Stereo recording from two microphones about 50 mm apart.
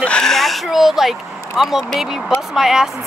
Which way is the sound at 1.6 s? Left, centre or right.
Centre.